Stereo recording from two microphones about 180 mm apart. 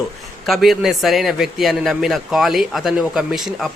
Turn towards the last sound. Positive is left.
turn(degrees=0)  # may be behind; listen again after turning